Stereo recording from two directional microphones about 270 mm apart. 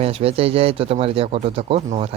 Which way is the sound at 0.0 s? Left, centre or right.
Right.